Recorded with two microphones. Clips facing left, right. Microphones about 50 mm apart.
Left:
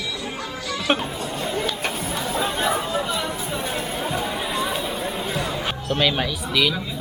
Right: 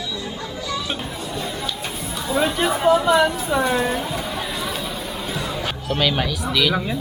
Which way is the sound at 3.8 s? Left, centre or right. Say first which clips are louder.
Right 6 dB; right.